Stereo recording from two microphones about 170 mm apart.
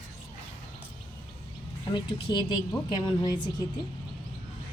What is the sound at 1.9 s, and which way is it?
A woman's voice, 25° left (ahead or behind).